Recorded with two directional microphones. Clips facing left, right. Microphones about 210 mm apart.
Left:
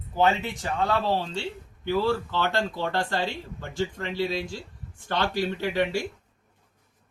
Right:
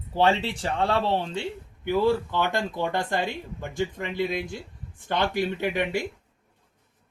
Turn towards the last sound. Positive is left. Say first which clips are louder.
# even
turn(degrees=-20)  # may be behind; listen again after turning